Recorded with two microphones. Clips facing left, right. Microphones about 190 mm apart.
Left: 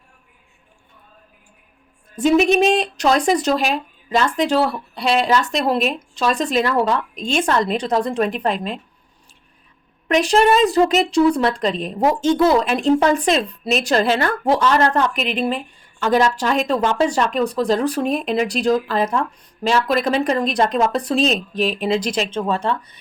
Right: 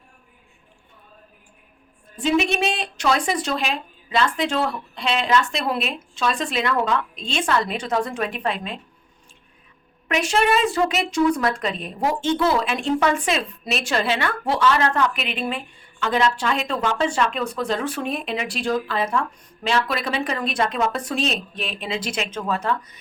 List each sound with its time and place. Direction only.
2.1 s a woman's voice: 40° left (ahead or behind)
10.1 s a woman's voice: 35° left (ahead or behind)